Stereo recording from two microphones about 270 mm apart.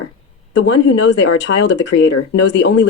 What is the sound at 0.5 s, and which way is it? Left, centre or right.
Speech, left.